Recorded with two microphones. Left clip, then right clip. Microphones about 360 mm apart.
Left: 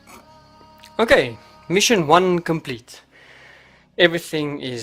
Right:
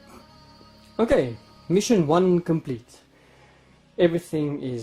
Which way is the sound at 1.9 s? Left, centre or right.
Left.